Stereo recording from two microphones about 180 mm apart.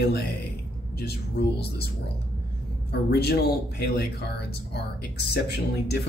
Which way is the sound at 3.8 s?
65° left (ahead or behind).